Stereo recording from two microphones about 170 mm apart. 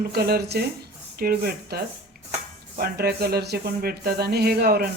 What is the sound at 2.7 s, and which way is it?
Speech, 65° right (ahead or behind).